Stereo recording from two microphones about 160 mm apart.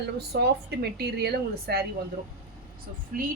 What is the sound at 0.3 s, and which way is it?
Speech, 90° right.